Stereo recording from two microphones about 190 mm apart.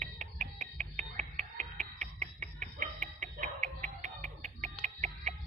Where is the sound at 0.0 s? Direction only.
40° right (ahead or behind).